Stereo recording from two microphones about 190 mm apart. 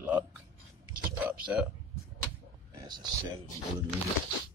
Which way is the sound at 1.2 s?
5° right (ahead or behind).